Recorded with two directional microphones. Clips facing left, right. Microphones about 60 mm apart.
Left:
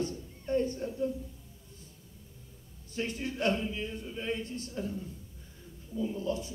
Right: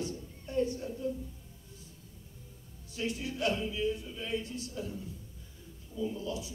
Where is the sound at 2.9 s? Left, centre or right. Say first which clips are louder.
Left 1 dB; left.